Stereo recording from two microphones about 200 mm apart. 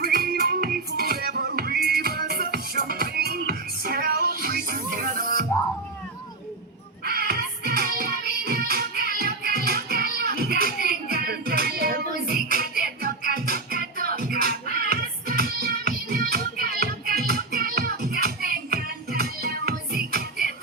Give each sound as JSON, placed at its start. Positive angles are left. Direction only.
{"t": 0.0, "sound": "music", "side_deg": -50}
{"t": 7.0, "sound": "music", "side_deg": -50}
{"t": 10.8, "sound": "child singing", "side_deg": -50}
{"t": 12.3, "sound": "music", "side_deg": -50}